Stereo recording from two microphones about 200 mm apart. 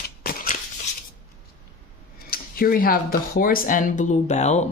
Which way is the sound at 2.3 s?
45° left (ahead or behind).